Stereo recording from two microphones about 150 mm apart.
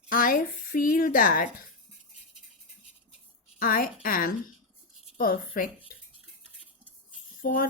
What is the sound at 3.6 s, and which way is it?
A woman's voice, 70° left (ahead or behind).